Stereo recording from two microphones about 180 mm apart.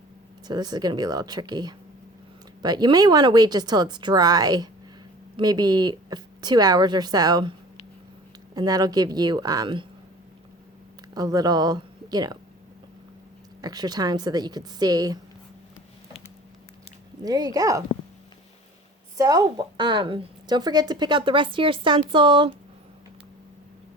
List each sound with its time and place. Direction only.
0.4 s speech: 20° right (ahead or behind)
8.5 s speech: 20° right (ahead or behind)
11.1 s speech: 20° right (ahead or behind)
13.6 s speech: 20° right (ahead or behind)
17.2 s speech: 20° right (ahead or behind)
19.1 s speech: 20° right (ahead or behind)